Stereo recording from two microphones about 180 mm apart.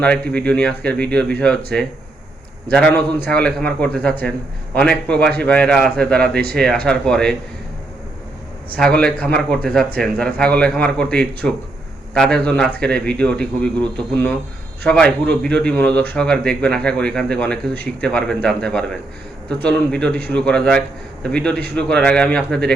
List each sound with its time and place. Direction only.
0.0 s speech: 5° left (ahead or behind)
6.3 s speech: 60° right (ahead or behind)
6.6 s speech: 5° left (ahead or behind)
9.2 s speech: 5° left (ahead or behind)